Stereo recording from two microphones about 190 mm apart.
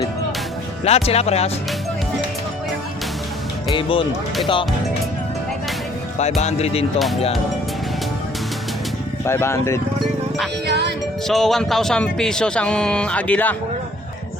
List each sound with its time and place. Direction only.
0.9 s speech: 35° left (ahead or behind)
3.7 s speech: 25° left (ahead or behind)
6.1 s speech: 35° left (ahead or behind)
9.2 s speech: 15° left (ahead or behind)
10.7 s speech: 60° right (ahead or behind)
11.3 s speech: centre (ahead or behind)